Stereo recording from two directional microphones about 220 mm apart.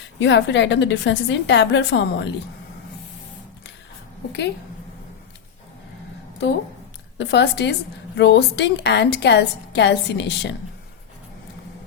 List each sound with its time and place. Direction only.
0.2 s a woman's voice: 55° left (ahead or behind)
7.2 s a woman's voice: 50° left (ahead or behind)